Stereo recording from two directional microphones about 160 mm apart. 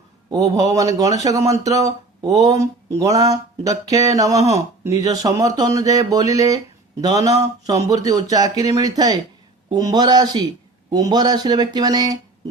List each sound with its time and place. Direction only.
0.3 s speech: 20° right (ahead or behind)